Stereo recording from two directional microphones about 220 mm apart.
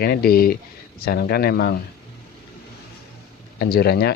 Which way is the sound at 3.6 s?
45° left (ahead or behind).